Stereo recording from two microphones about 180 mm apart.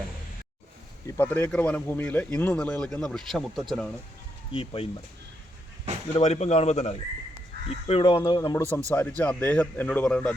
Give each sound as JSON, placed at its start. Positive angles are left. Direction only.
{"t": 1.0, "sound": "speech", "side_deg": 10}
{"t": 4.5, "sound": "speech", "side_deg": 30}
{"t": 6.1, "sound": "speech", "side_deg": 35}
{"t": 8.2, "sound": "speech", "side_deg": 20}
{"t": 8.9, "sound": "speech", "side_deg": 10}